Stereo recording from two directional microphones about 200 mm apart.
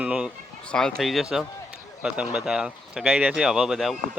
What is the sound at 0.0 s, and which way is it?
Speech, 5° right (ahead or behind).